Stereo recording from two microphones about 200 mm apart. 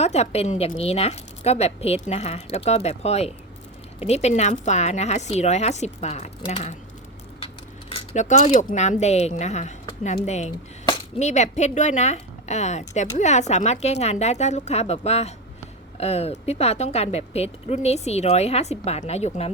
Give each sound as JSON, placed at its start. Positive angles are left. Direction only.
{"t": 0.0, "sound": "a woman's voice", "side_deg": 30}
{"t": 7.9, "sound": "keys jangling", "side_deg": 35}
{"t": 8.5, "sound": "a woman's voice", "side_deg": 40}